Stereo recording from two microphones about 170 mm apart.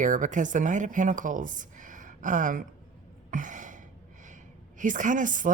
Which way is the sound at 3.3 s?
50° right (ahead or behind).